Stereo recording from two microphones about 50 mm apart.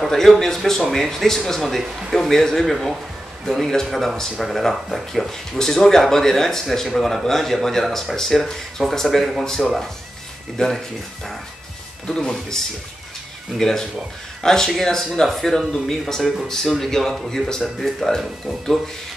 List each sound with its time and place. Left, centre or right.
0.0 s speech: centre
12.1 s speech: centre